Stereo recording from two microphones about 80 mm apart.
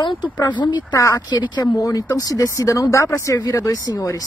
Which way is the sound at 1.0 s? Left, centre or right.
Left.